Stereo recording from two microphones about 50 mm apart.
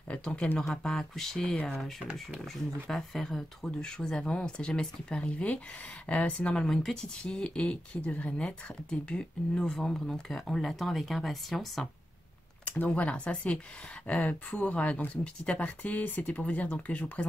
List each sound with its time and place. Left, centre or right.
0.1 s speech: left
0.8 s speech: centre
12.6 s speech: left